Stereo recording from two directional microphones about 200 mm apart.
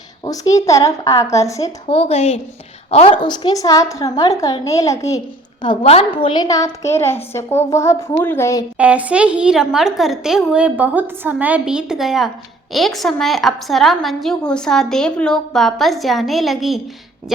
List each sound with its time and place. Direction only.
0.3 s a woman's voice: 15° left (ahead or behind)
1.9 s a woman's voice: 30° left (ahead or behind)
5.6 s a woman's voice: 30° left (ahead or behind); by 8.6 s 15° left (ahead or behind)
8.8 s a woman's voice: 5° right (ahead or behind)